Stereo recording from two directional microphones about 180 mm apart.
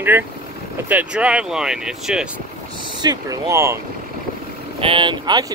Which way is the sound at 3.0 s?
20° right (ahead or behind).